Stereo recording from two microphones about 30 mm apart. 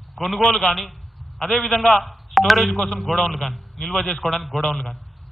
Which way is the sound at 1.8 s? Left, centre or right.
Centre.